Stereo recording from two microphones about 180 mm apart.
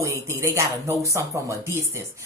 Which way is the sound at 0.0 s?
15° right (ahead or behind).